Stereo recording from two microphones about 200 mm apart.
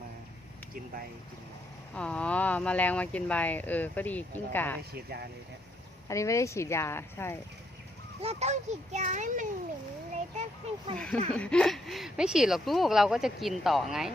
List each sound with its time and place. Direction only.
2.0 s speech: 5° left (ahead or behind)
6.1 s speech: 15° left (ahead or behind)
8.2 s a child's voice: 30° right (ahead or behind)
10.9 s speech: 5° left (ahead or behind)